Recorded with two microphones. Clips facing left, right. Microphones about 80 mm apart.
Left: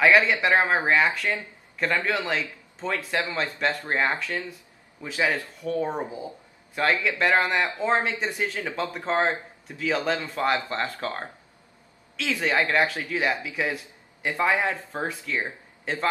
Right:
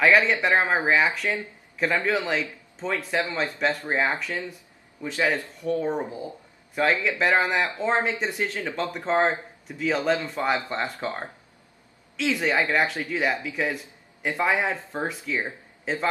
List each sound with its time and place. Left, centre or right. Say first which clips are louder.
0.3 s speech: even; centre
5.8 s speech: right 1 dB; centre
6.7 s speech: right 1 dB; centre